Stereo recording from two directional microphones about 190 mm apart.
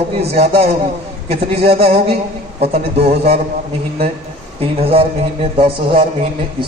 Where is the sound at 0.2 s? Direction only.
30° right (ahead or behind).